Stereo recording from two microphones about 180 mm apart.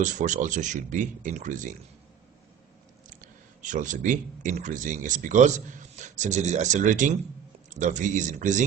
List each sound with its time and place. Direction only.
0.0 s speech: 45° right (ahead or behind)
3.1 s speech: 45° right (ahead or behind)